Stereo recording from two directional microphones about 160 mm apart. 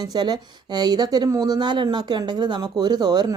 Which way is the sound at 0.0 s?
25° right (ahead or behind).